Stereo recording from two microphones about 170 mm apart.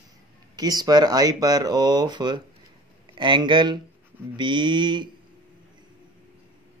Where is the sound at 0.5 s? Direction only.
25° right (ahead or behind).